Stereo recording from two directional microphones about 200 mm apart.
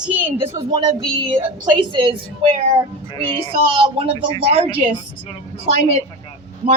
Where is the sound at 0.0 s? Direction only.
10° right (ahead or behind).